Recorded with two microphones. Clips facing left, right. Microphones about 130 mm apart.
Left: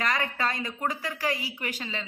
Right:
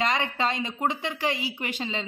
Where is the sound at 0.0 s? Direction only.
25° right (ahead or behind).